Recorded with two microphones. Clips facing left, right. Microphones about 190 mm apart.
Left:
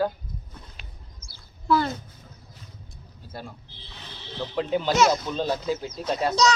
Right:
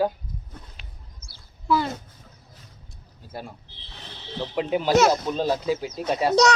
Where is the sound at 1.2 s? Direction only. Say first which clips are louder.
Even; 60° right (ahead or behind).